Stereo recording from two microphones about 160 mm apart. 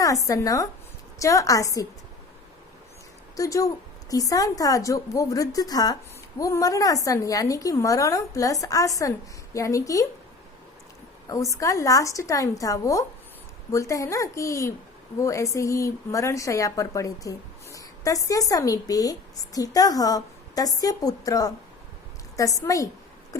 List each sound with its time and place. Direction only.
0.0 s a woman's voice: 20° left (ahead or behind)
3.3 s a woman's voice: 20° left (ahead or behind)
11.3 s a woman's voice: 20° left (ahead or behind)